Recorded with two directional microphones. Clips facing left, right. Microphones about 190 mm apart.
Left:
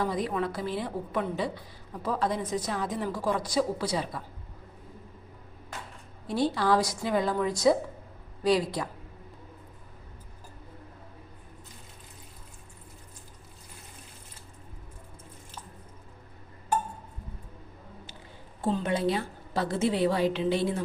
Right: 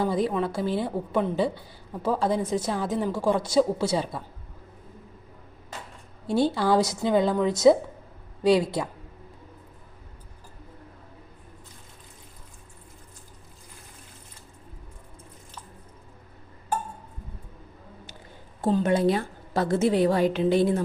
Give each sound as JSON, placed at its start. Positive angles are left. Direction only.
{"t": 0.0, "sound": "a woman's voice", "side_deg": -25}
{"t": 6.2, "sound": "a woman's voice", "side_deg": -25}
{"t": 18.6, "sound": "a woman's voice", "side_deg": -45}